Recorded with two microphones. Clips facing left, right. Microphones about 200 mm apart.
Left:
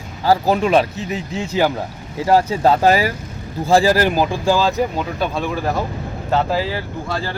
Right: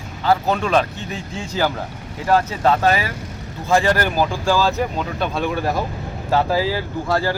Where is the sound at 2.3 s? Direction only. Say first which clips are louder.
Left 3 dB; 30° left (ahead or behind).